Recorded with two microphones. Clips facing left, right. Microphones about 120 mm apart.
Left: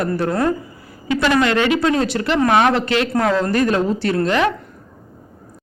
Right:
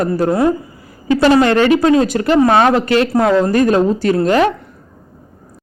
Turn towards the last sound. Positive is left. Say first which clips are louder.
# right 5 dB
turn(degrees=-40)  # may be behind; listen again after turning